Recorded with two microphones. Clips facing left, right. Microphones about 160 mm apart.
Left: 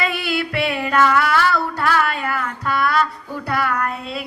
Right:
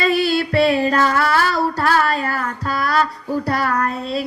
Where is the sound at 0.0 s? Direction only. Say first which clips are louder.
Right 5 dB; 35° right (ahead or behind).